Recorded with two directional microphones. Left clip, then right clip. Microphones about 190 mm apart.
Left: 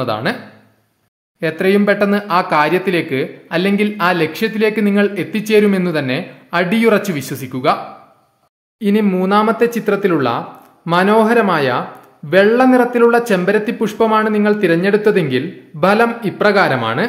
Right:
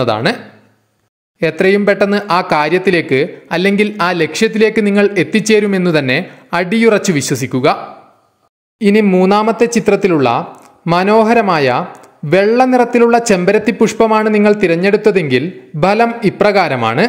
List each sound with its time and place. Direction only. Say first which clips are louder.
0.0 s speech: right 5 dB; 30° right (ahead or behind)
1.4 s speech: right 3 dB; 25° right (ahead or behind)